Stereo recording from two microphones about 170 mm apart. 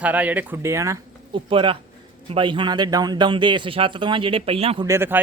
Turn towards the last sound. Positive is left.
turn(degrees=-15)  # may be behind; listen again after turning